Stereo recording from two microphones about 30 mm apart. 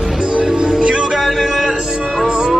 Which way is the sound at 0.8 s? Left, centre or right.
Right.